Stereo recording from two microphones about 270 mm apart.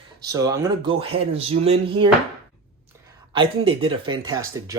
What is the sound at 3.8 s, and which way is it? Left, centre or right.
Speech, centre.